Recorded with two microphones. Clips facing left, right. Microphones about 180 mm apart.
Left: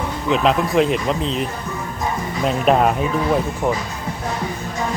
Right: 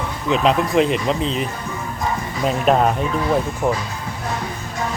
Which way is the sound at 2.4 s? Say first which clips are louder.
Even; centre (ahead or behind).